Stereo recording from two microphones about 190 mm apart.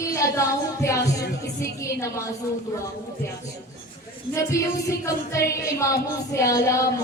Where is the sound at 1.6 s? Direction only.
15° left (ahead or behind).